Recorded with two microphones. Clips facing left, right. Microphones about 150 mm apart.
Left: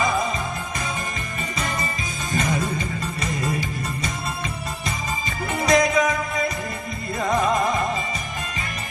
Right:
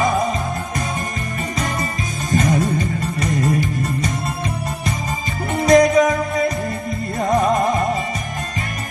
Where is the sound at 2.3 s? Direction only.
40° right (ahead or behind).